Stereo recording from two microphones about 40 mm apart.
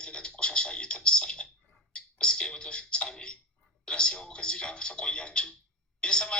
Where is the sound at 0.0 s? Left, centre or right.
Left.